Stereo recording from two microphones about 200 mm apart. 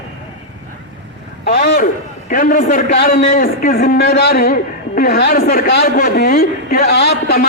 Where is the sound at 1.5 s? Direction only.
50° left (ahead or behind).